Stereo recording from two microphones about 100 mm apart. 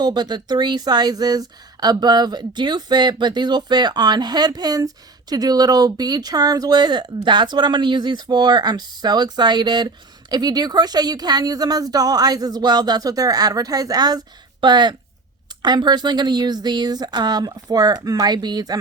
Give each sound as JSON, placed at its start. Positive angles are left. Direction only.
{"t": 0.0, "sound": "speech", "side_deg": -45}